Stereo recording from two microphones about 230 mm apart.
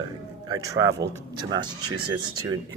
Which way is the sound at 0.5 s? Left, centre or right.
Centre.